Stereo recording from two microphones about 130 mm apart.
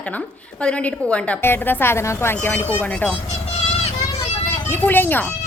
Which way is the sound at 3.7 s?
55° left (ahead or behind).